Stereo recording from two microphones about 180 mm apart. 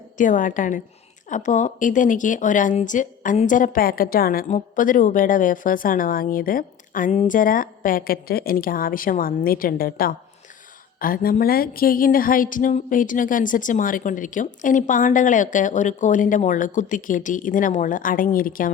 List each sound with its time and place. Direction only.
0.2 s a woman's voice: 45° left (ahead or behind)